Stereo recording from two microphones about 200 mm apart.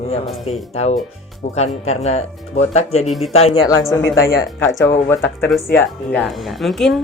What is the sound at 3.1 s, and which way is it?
Speech, centre (ahead or behind).